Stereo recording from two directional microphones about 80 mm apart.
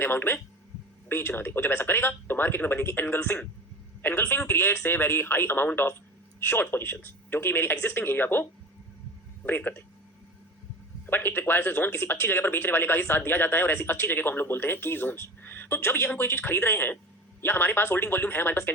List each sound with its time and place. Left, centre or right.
0.0 s speech: left
11.0 s speech: left